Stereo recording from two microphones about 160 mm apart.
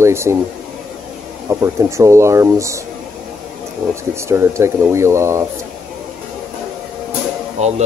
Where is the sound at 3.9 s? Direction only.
15° right (ahead or behind).